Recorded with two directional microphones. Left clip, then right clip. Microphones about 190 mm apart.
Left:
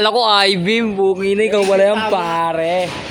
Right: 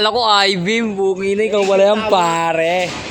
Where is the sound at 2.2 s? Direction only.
45° right (ahead or behind).